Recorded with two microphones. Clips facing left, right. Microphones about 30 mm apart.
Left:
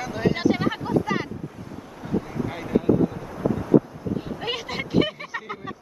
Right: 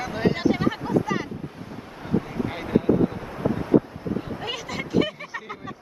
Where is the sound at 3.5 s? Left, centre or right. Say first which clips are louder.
Left 1 dB; right.